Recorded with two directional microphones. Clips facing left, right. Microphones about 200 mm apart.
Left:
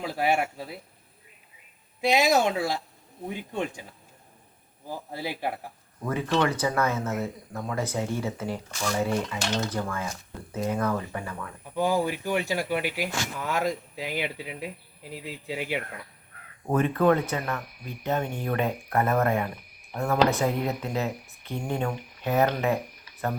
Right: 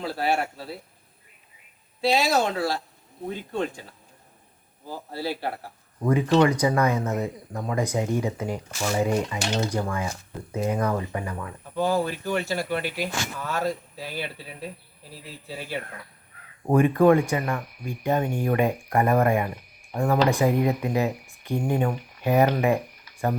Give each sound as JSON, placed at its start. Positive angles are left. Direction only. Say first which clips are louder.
{"t": 0.0, "sound": "speech", "louder": "even", "side_deg": 15}
{"t": 2.0, "sound": "speech", "louder": "even", "side_deg": 15}
{"t": 4.9, "sound": "speech", "louder": "right 3 dB", "side_deg": 15}
{"t": 6.4, "sound": "speech", "louder": "right 5 dB", "side_deg": -15}
{"t": 8.7, "sound": "speech", "louder": "right 3 dB", "side_deg": -25}
{"t": 9.0, "sound": "speech", "louder": "right 3 dB", "side_deg": -15}
{"t": 11.6, "sound": "speech", "louder": "right 1 dB", "side_deg": 15}
{"t": 16.6, "sound": "speech", "louder": "right 4 dB", "side_deg": -10}